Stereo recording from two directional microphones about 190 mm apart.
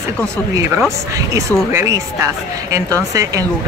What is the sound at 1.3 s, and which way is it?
Speech, 15° right (ahead or behind).